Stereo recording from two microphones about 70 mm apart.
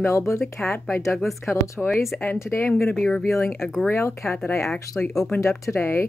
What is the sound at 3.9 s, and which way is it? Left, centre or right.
Speech, left.